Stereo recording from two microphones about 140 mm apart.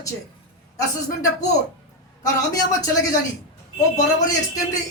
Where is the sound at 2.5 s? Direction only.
25° left (ahead or behind).